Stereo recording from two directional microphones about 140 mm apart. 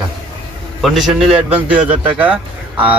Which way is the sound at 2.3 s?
40° right (ahead or behind).